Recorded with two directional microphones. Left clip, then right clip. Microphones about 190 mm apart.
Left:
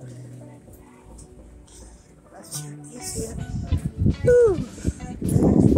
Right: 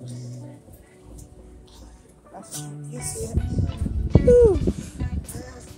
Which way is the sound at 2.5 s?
15° right (ahead or behind).